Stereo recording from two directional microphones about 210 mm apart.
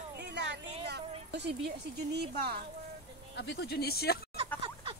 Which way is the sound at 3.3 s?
50° left (ahead or behind).